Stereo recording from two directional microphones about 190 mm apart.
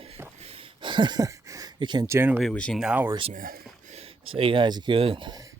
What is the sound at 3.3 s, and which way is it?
Speech, 50° right (ahead or behind).